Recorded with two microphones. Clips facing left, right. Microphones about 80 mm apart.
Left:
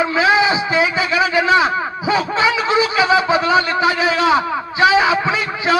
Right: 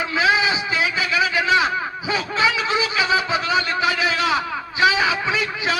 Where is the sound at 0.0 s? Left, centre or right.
Left.